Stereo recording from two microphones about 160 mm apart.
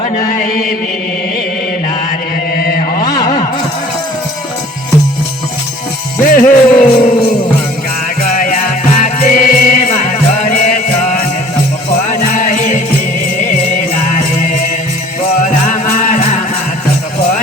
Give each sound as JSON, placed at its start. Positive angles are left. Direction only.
{"t": 2.6, "sound": "chant", "side_deg": 65}
{"t": 6.2, "sound": "music", "side_deg": 60}
{"t": 6.8, "sound": "jingle bell", "side_deg": 40}
{"t": 8.2, "sound": "music", "side_deg": 55}
{"t": 15.6, "sound": "music", "side_deg": 50}